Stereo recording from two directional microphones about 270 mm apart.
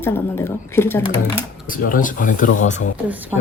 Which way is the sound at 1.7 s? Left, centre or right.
Left.